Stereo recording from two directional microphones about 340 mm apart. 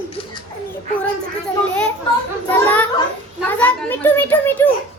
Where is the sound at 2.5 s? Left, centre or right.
Centre.